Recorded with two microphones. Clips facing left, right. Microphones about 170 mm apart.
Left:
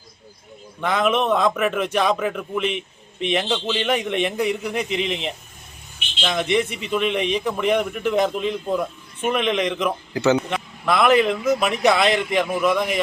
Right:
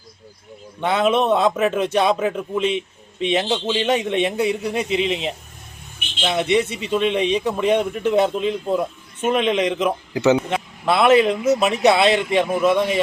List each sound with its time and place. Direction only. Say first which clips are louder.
0.8 s speech: right 2 dB; 30° right (ahead or behind)
6.2 s speech: right 2 dB; 25° right (ahead or behind)